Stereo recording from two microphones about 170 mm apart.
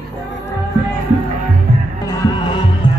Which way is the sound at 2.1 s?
25° left (ahead or behind).